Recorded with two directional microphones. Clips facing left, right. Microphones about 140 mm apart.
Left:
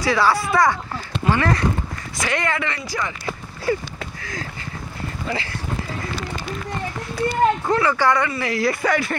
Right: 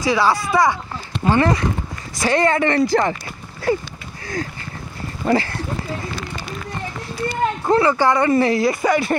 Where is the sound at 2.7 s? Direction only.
55° right (ahead or behind).